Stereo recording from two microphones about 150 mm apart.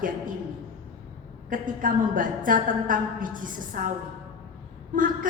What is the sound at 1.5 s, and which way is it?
A woman's voice, 65° right (ahead or behind).